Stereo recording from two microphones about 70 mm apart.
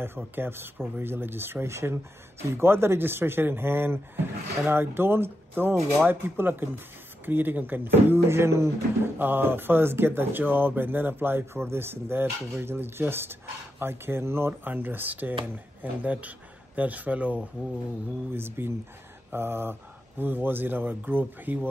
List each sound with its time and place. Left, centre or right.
0.0 s speech: right
9.2 s speech: right
18.3 s speech: right